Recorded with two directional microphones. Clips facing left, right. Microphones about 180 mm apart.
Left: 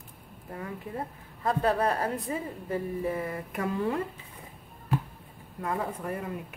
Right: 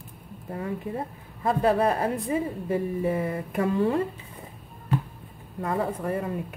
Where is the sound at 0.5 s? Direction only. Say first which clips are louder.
Right 6 dB; 25° right (ahead or behind).